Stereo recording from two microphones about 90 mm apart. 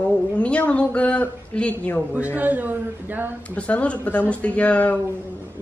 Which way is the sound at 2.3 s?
20° right (ahead or behind).